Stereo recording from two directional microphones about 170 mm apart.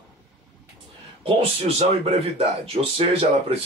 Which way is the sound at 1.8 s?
40° right (ahead or behind).